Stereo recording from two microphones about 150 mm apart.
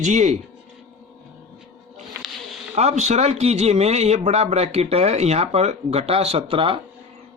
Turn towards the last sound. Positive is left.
turn(degrees=-35)  # may be behind; listen again after turning